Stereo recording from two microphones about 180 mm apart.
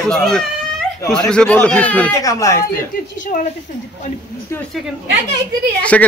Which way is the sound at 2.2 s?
20° left (ahead or behind).